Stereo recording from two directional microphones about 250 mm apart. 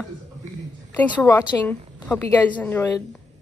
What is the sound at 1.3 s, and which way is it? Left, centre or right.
A woman's voice, centre.